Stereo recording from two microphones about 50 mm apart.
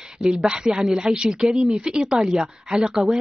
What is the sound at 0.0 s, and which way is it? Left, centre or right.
Speech, centre.